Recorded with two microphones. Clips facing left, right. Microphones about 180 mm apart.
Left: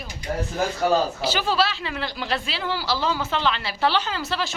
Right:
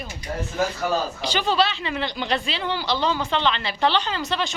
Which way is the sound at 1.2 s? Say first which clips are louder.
Right 1 dB; 5° left (ahead or behind).